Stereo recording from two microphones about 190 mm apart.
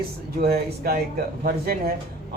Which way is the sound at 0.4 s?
55° right (ahead or behind).